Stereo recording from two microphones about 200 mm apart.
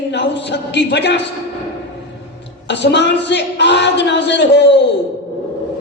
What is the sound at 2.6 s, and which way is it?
A man's voice, 60° left (ahead or behind).